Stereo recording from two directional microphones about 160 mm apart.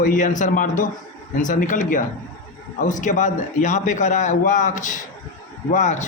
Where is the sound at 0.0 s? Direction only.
55° left (ahead or behind).